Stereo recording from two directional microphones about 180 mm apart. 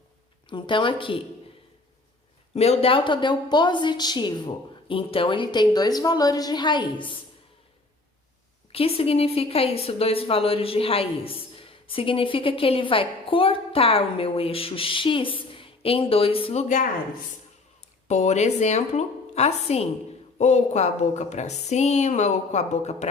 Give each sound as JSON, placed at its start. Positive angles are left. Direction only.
{"t": 0.5, "sound": "a woman's voice", "side_deg": 25}
{"t": 2.6, "sound": "a woman's voice", "side_deg": 35}
{"t": 8.7, "sound": "a woman's voice", "side_deg": 30}
{"t": 18.1, "sound": "a woman's voice", "side_deg": 40}